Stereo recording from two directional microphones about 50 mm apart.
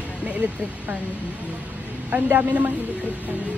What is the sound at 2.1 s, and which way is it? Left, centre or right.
Speech, right.